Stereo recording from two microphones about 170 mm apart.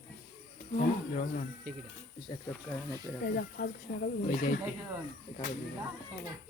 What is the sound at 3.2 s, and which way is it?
Speech, 70° left (ahead or behind).